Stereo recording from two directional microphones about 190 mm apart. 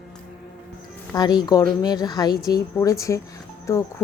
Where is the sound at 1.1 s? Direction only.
20° left (ahead or behind).